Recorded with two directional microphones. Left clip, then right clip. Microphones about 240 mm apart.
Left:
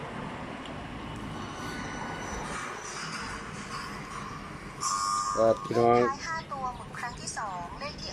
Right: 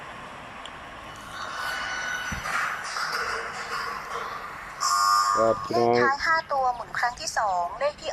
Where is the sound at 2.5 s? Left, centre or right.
Right.